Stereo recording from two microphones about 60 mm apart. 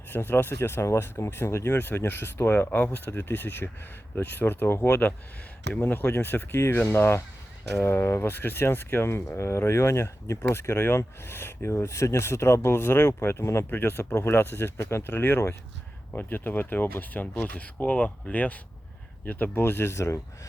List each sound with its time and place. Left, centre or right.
0.1 s speech: left
4.8 s speech: left
13.7 s speech: left